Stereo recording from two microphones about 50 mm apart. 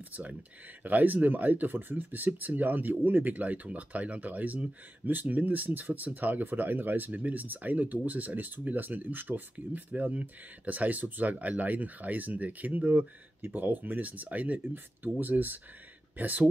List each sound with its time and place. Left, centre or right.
0.1 s speech: right